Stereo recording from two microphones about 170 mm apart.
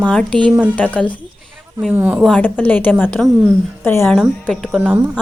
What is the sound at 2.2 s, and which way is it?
A woman's voice, 5° left (ahead or behind).